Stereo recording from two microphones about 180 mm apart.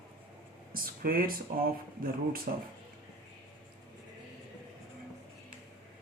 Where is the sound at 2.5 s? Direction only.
55° right (ahead or behind).